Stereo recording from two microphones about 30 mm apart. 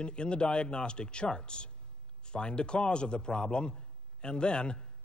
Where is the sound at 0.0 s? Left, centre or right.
Left.